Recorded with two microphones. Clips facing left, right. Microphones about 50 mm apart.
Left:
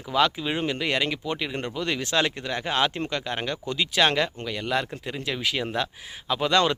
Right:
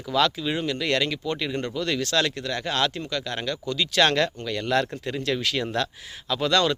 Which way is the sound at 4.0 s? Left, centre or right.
Centre.